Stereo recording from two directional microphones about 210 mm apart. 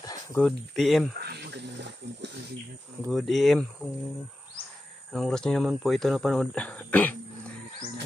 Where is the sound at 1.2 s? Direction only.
50° right (ahead or behind).